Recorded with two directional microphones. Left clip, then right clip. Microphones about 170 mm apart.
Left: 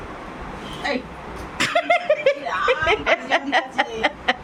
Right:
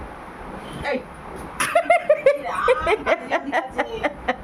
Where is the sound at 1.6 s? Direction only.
25° right (ahead or behind).